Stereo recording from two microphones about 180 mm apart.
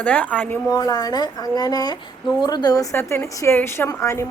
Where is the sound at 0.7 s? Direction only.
20° left (ahead or behind).